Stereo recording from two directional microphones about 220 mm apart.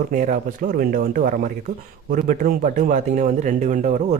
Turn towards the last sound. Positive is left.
turn(degrees=-35)  # may be behind; listen again after turning